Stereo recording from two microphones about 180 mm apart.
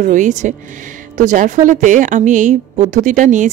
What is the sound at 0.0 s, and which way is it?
A woman's voice, 45° right (ahead or behind).